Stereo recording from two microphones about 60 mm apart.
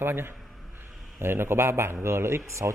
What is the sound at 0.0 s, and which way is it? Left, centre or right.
A man's voice, right.